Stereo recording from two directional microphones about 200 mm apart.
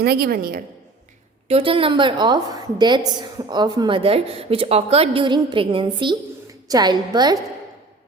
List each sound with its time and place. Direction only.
0.0 s a woman's voice: 50° right (ahead or behind)
1.5 s a woman's voice: 30° right (ahead or behind)